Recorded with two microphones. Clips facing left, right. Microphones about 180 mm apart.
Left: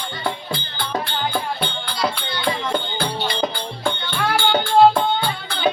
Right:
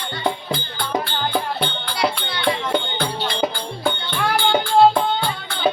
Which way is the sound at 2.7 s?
Centre (ahead or behind).